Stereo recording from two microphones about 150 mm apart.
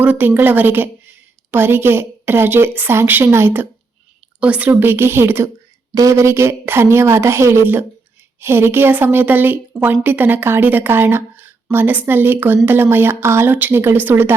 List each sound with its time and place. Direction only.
0.0 s a woman's voice: 10° right (ahead or behind)